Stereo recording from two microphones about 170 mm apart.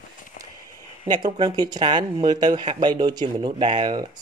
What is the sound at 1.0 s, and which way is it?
Speech, 25° right (ahead or behind).